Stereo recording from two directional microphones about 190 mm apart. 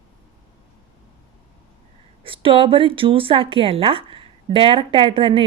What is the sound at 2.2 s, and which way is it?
Speech, 30° right (ahead or behind).